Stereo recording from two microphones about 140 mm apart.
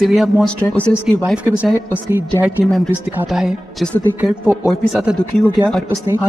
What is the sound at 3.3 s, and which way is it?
Speech, centre (ahead or behind).